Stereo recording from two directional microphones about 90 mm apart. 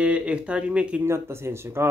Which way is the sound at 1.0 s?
30° right (ahead or behind).